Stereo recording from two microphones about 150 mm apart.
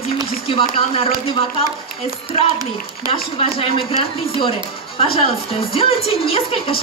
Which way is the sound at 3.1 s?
40° left (ahead or behind).